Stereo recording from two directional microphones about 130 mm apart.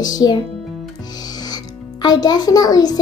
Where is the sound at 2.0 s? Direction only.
30° left (ahead or behind).